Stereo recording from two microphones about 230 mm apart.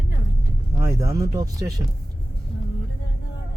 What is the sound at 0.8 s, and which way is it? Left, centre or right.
Speech, centre.